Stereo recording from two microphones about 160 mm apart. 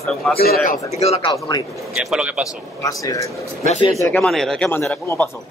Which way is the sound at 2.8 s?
20° left (ahead or behind).